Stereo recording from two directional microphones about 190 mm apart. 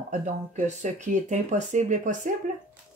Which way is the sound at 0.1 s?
40° right (ahead or behind).